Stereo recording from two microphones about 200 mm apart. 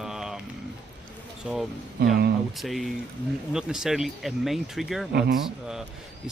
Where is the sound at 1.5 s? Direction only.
5° right (ahead or behind).